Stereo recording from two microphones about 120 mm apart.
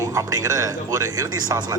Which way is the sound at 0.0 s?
30° right (ahead or behind).